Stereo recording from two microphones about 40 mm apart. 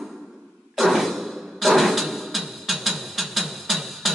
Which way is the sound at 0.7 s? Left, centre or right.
Centre.